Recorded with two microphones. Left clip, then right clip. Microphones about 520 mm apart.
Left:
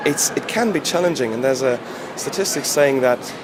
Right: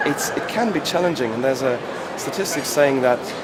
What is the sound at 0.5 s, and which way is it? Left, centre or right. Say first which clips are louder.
Speech: left 2 dB; left.